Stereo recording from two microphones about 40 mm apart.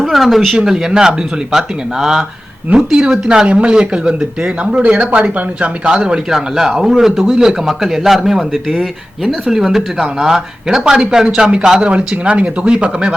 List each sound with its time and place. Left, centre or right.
0.1 s speech: centre; by 6.1 s right
6.3 s speech: centre
11.9 s speech: right